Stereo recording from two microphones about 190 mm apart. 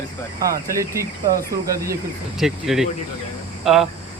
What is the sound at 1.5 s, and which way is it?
Speech, 15° right (ahead or behind).